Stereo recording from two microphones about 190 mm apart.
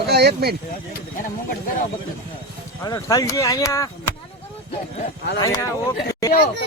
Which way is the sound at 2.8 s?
20° left (ahead or behind).